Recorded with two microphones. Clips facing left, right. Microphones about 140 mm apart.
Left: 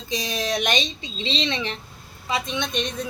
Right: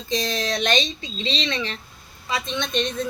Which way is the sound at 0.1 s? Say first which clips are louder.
Right 1 dB; 15° left (ahead or behind).